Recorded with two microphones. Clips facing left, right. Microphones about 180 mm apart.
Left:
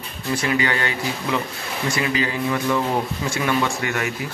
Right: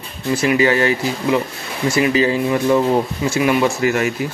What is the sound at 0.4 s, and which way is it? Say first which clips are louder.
Speech: right 8 dB; 25° right (ahead or behind).